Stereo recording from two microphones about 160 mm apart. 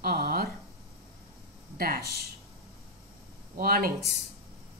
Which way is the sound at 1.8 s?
70° right (ahead or behind).